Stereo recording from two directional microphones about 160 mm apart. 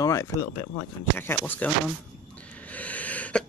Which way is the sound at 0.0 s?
20° left (ahead or behind).